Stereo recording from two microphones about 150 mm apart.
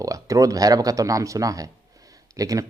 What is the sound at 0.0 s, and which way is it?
Speech, 20° right (ahead or behind).